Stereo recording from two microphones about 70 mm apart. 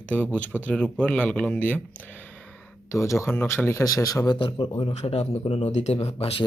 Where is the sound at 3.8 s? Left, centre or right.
Left.